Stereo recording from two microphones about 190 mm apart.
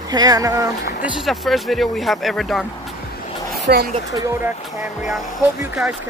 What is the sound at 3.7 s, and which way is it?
Speech, 55° right (ahead or behind).